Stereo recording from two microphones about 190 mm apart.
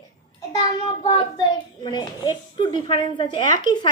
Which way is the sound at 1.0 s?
20° left (ahead or behind).